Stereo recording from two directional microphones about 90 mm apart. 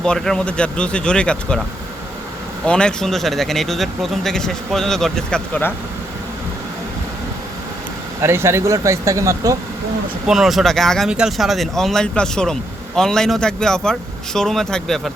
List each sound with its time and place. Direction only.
0.0 s speech: 10° left (ahead or behind)
2.6 s speech: 10° left (ahead or behind)
8.2 s speech: 30° right (ahead or behind)
10.2 s speech: 5° right (ahead or behind)